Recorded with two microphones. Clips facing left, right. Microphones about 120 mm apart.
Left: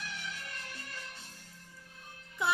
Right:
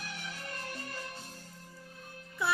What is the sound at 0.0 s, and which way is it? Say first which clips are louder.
Music: even; 40° right (ahead or behind).